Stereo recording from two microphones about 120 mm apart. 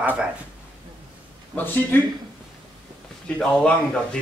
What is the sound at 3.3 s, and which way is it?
Speech, 5° left (ahead or behind).